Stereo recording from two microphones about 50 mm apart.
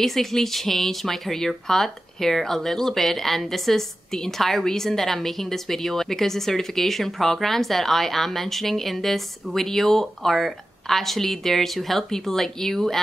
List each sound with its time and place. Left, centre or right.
0.0 s speech: centre